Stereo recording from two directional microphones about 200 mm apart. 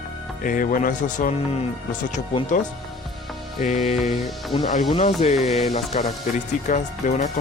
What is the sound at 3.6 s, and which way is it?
Speech, 40° left (ahead or behind).